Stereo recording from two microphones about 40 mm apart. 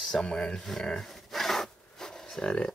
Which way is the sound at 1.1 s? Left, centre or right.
Centre.